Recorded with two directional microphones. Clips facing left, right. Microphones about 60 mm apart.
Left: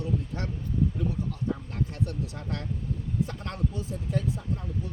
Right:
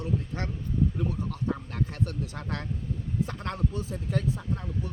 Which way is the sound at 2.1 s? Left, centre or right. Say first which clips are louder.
Even; right.